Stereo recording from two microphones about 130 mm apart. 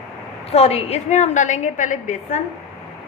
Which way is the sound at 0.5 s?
50° left (ahead or behind).